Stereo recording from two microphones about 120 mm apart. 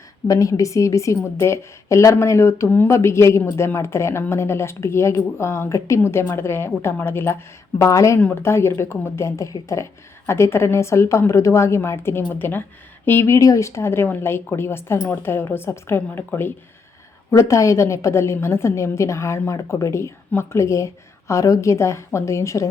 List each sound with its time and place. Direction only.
0.3 s a woman's voice: 25° left (ahead or behind)